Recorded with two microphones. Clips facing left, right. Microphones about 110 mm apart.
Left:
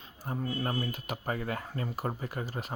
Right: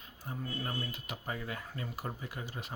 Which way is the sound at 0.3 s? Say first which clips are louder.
Left 6 dB; 45° left (ahead or behind).